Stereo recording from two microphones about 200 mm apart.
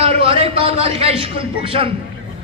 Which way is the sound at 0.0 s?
30° right (ahead or behind).